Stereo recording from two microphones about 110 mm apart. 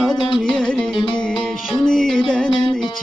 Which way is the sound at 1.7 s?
5° left (ahead or behind).